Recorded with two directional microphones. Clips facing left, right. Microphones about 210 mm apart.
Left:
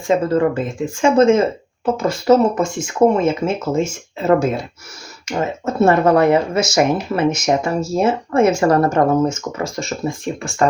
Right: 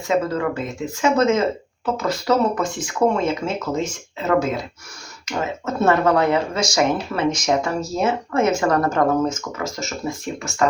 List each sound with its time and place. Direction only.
0.1 s speech: 30° left (ahead or behind)